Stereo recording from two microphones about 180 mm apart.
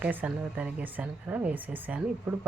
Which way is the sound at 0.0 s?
10° right (ahead or behind).